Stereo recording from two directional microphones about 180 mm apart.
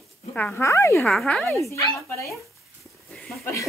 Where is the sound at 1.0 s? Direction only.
5° left (ahead or behind).